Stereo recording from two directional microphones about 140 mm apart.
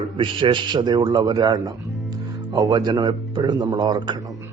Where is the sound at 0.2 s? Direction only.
35° right (ahead or behind).